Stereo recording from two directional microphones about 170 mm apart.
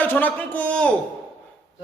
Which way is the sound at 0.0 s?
10° left (ahead or behind).